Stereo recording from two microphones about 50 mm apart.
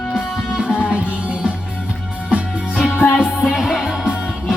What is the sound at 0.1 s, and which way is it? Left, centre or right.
Music, centre.